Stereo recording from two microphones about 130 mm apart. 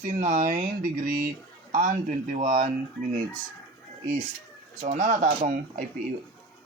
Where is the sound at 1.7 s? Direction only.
70° right (ahead or behind).